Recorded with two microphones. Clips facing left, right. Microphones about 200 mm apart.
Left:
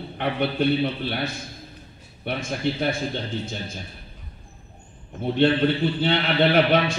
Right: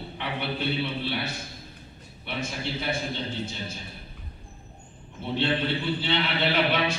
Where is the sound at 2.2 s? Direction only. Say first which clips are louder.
Left 7 dB; 50° left (ahead or behind).